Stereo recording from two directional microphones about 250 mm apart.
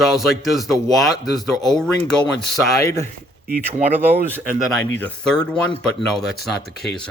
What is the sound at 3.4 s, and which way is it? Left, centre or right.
Speech, right.